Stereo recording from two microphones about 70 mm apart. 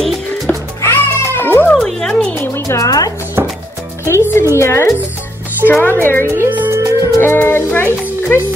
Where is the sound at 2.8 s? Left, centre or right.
Left.